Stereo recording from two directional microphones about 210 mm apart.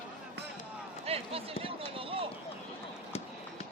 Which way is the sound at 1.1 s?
25° right (ahead or behind).